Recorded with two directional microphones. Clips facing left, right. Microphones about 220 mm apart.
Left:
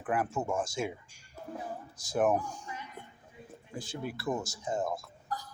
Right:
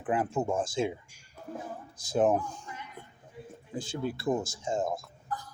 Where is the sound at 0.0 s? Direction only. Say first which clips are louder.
Right 3 dB; 25° right (ahead or behind).